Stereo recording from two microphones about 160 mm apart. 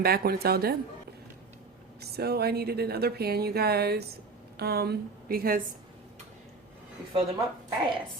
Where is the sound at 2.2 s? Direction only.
80° right; by 5.6 s 65° right (ahead or behind).